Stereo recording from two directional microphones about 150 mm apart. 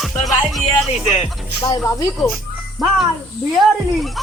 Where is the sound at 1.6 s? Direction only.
25° left (ahead or behind).